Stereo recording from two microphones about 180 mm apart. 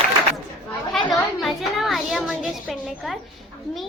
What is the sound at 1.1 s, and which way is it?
A woman's voice, centre (ahead or behind).